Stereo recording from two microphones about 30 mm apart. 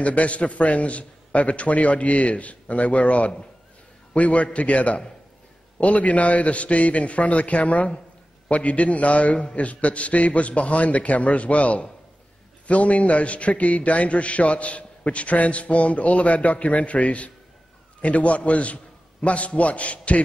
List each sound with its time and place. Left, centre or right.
0.0 s a man's voice: left